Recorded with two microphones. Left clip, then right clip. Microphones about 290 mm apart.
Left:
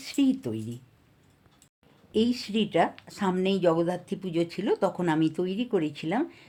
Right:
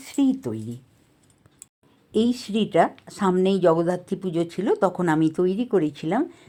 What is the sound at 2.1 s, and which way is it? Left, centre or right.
Speech, centre.